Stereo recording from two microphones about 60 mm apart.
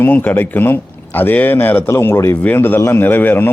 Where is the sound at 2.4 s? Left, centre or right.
Left.